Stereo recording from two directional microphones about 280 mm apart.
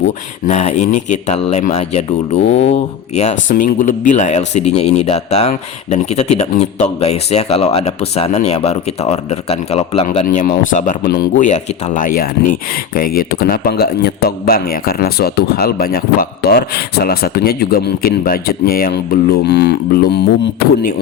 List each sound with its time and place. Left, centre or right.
0.4 s speech: left